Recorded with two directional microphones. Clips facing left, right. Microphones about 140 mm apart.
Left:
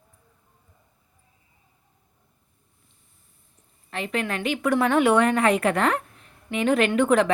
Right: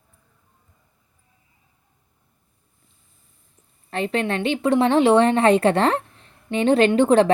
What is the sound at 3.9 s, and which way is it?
A woman's voice, 35° right (ahead or behind).